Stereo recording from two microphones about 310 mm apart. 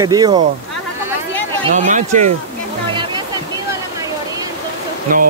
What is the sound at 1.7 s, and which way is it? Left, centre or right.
Speech, right.